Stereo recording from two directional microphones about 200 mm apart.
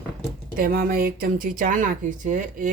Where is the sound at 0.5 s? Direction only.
45° right (ahead or behind).